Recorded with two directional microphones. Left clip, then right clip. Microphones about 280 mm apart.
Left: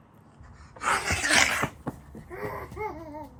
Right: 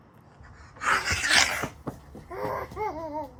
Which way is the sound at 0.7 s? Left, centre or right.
Centre.